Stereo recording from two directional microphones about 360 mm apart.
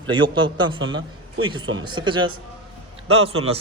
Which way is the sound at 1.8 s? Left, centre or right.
Centre.